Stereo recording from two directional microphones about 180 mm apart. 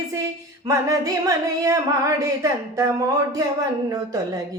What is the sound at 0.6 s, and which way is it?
Singing, 15° right (ahead or behind).